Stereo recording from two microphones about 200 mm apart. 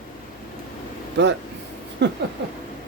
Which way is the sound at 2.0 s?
60° right (ahead or behind).